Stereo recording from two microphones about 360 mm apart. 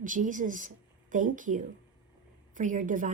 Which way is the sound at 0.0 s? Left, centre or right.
Right.